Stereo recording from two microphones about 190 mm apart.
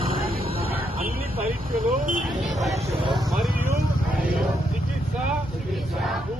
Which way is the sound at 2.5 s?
Centre (ahead or behind).